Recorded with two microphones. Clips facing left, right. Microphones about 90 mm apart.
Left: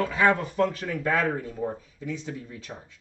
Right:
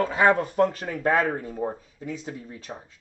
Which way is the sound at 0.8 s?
40° right (ahead or behind).